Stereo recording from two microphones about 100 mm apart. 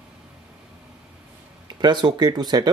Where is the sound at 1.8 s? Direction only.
50° right (ahead or behind).